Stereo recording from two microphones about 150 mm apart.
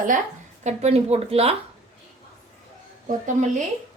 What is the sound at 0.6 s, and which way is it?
Speech, 45° right (ahead or behind).